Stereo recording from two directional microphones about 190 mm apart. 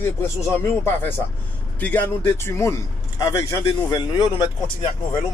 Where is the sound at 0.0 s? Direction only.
15° left (ahead or behind).